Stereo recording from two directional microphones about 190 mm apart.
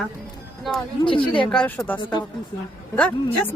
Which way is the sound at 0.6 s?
Centre (ahead or behind).